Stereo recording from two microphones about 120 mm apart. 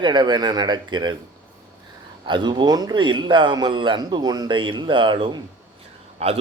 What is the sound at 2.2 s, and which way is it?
A man's voice, 40° right (ahead or behind).